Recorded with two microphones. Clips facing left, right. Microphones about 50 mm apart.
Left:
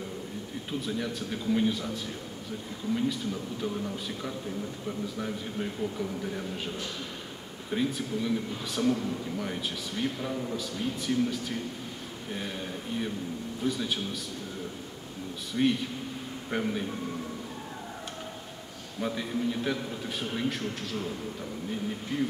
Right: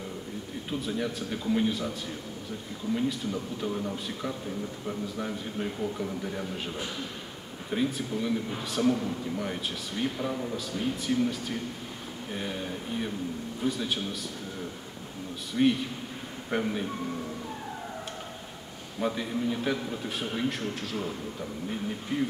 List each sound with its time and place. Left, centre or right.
0.7 s speech: centre
2.9 s speech: centre
7.7 s speech: centre
15.5 s a man's voice: centre
18.9 s speech: centre
22.1 s speech: centre